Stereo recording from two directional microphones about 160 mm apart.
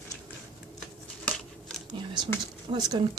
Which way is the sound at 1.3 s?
5° left (ahead or behind).